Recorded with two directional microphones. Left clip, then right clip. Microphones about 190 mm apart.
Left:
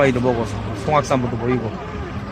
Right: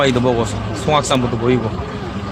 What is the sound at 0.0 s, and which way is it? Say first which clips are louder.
Speech: right 2 dB; centre (ahead or behind).